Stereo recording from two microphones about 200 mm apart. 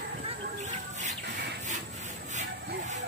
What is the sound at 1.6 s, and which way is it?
Rub, 35° right (ahead or behind).